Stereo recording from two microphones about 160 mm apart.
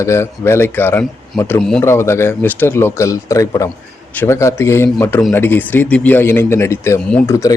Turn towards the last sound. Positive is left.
turn(degrees=20)  # may be behind; listen again after turning